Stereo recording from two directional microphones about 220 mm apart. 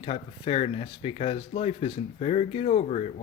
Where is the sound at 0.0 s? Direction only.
25° left (ahead or behind).